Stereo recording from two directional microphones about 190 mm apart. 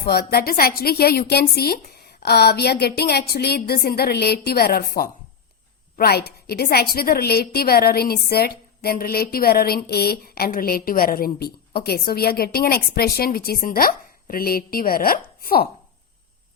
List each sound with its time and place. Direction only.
0.0 s a woman's voice: 55° left (ahead or behind)